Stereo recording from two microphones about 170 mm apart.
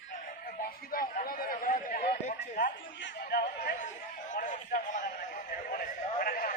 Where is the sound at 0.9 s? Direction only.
60° left (ahead or behind).